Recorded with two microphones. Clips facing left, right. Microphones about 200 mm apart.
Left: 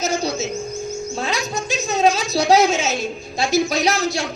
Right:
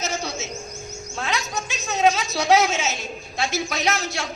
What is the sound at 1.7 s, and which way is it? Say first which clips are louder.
A woman's voice: left 3 dB; 35° left (ahead or behind).